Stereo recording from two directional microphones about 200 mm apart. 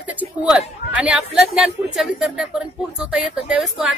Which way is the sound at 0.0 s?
10° right (ahead or behind).